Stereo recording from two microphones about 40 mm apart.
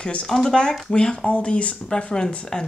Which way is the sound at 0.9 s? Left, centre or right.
Left.